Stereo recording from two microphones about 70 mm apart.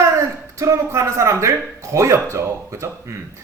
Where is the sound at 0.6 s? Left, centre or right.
Right.